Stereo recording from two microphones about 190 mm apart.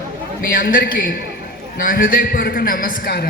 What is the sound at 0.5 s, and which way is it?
A man's voice, 50° left (ahead or behind).